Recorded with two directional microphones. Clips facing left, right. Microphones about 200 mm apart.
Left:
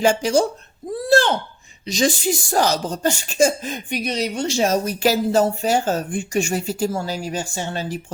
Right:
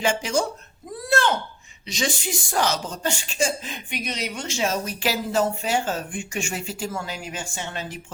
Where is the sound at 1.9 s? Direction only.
40° left (ahead or behind).